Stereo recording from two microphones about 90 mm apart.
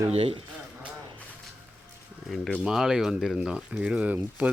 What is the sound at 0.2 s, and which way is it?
Speech, 90° right.